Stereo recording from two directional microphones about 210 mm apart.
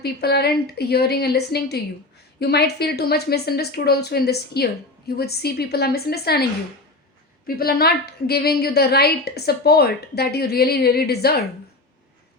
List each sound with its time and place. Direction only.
0.0 s a woman's voice: 50° left (ahead or behind)
7.4 s a woman's voice: 45° left (ahead or behind)